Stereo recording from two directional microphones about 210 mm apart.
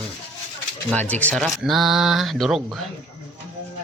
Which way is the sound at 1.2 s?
5° left (ahead or behind).